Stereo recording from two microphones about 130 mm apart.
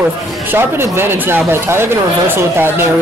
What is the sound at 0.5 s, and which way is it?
Speech, 20° right (ahead or behind).